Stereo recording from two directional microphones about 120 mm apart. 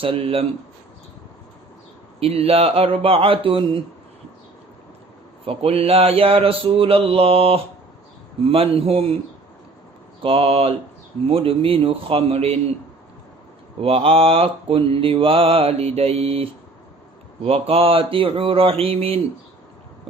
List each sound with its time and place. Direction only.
0.0 s mantra: 50° right (ahead or behind)
2.2 s mantra: 55° right (ahead or behind)
5.5 s mantra: 50° right (ahead or behind)
10.2 s mantra: 50° right (ahead or behind)
13.8 s mantra: 55° right (ahead or behind)